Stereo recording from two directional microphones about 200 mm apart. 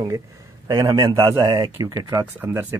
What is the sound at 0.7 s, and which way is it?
Speech, 20° right (ahead or behind).